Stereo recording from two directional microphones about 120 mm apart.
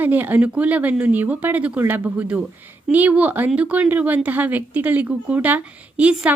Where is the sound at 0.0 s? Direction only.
15° right (ahead or behind).